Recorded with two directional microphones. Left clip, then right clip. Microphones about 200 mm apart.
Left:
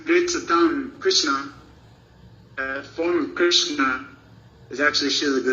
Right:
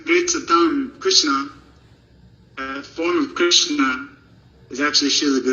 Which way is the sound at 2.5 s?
30° right (ahead or behind).